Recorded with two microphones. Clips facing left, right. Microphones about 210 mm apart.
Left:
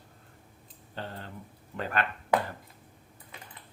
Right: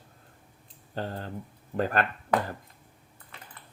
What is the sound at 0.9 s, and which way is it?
Speech, 40° right (ahead or behind).